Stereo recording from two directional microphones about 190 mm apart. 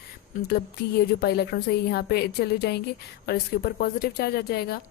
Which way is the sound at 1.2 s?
60° left (ahead or behind).